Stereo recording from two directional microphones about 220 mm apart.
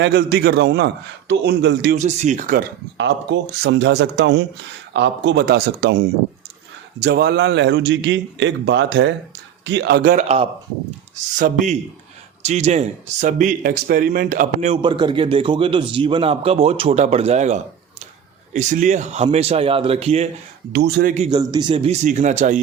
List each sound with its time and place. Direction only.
0.0 s a man's voice: 45° right (ahead or behind)
2.0 s speech: 35° right (ahead or behind)
3.0 s a man's voice: 50° right (ahead or behind)
7.0 s a man's voice: 45° right (ahead or behind)
10.2 s speech: 25° right (ahead or behind)
11.3 s speech: 35° right (ahead or behind)
20.7 s a man's voice: 45° right (ahead or behind)
21.2 s speech: 20° right (ahead or behind)